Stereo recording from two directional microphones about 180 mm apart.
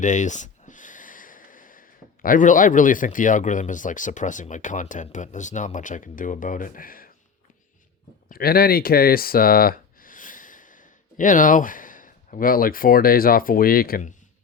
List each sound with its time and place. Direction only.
0.0 s speech: 45° left (ahead or behind)
8.3 s speech: 55° left (ahead or behind)